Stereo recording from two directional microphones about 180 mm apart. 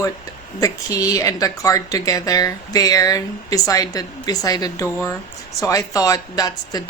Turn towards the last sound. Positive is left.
turn(degrees=20)  # may be behind; listen again after turning